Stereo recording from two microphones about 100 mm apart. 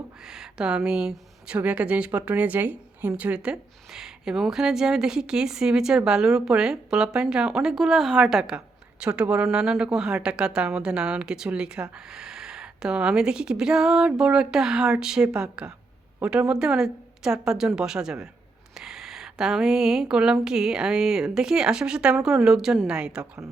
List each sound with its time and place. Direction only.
0.3 s speech: 5° right (ahead or behind)
9.2 s speech: 20° right (ahead or behind)
9.5 s speech: 10° right (ahead or behind)